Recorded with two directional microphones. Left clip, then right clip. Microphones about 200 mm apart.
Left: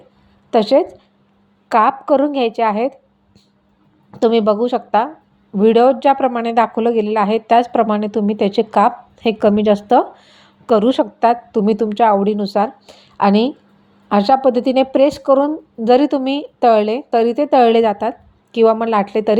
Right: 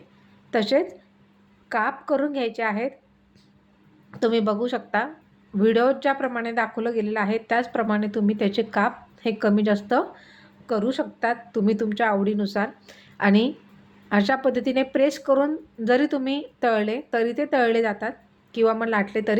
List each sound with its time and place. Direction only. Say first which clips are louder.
0.5 s speech: left 9 dB; 25° left (ahead or behind)
4.1 s speech: left 9 dB; 20° left (ahead or behind)